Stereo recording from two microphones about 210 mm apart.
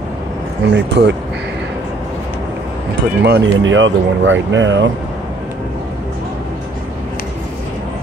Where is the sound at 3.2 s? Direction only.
55° right (ahead or behind).